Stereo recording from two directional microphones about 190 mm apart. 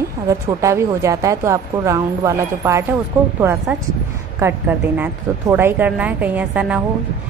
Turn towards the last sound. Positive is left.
turn(degrees=-5)  # may be behind; listen again after turning